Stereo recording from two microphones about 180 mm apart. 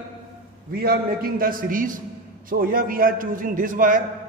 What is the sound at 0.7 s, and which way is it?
A man's voice, 55° right (ahead or behind).